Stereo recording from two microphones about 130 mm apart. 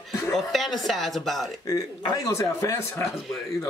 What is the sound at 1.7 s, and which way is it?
A man's voice, 25° left (ahead or behind).